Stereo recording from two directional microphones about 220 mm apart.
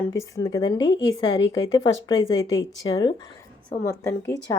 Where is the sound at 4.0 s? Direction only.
15° left (ahead or behind).